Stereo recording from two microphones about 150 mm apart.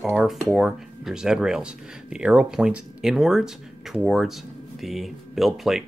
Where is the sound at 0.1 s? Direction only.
Centre (ahead or behind).